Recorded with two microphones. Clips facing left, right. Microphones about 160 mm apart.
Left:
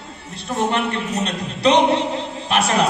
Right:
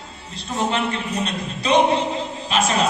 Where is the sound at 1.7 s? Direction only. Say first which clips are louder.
Left 3 dB; 70° left (ahead or behind).